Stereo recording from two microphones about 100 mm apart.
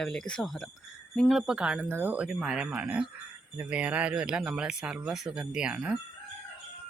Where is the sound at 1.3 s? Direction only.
5° right (ahead or behind).